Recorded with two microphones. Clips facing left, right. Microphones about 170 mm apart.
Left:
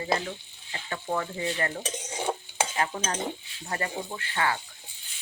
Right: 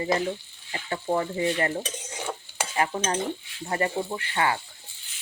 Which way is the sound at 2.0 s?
20° left (ahead or behind).